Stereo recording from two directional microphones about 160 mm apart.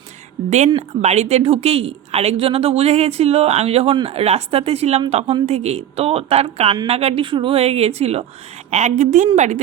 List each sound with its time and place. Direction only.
0.8 s a woman's voice: 45° right (ahead or behind)